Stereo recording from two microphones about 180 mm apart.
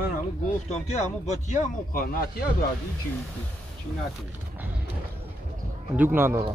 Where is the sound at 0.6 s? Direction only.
40° left (ahead or behind).